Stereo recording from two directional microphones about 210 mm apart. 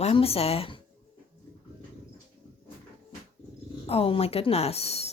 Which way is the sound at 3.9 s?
25° left (ahead or behind).